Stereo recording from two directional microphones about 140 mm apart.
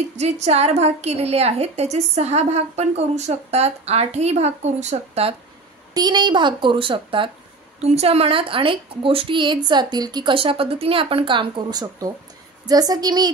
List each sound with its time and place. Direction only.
0.2 s a woman's voice: 50° right (ahead or behind)
5.9 s a woman's voice: 30° right (ahead or behind)
7.8 s a woman's voice: 50° right (ahead or behind); by 13.3 s 30° right (ahead or behind)